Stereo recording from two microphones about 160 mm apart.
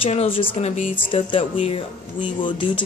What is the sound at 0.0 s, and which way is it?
Speech, 40° left (ahead or behind).